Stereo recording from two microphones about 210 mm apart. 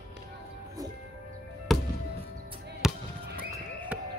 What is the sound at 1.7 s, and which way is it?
Music, centre (ahead or behind).